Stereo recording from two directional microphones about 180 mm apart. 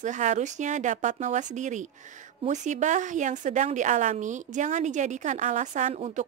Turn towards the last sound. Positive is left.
turn(degrees=-40)  # may be behind; listen again after turning